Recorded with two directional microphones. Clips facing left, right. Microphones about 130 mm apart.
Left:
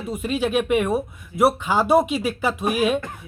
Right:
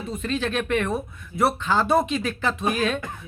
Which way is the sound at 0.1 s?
10° left (ahead or behind).